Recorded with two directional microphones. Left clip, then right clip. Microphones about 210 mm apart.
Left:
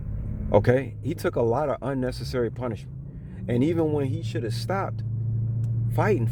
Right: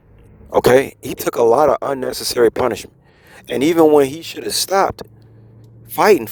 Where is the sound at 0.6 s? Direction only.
40° right (ahead or behind).